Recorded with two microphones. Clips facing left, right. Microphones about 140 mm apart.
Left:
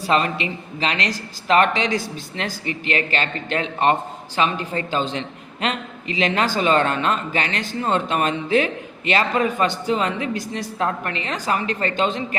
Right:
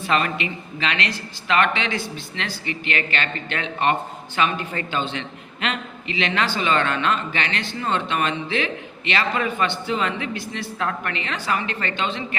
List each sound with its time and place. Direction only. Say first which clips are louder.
0.0 s a man's voice: left 2 dB; 35° left (ahead or behind)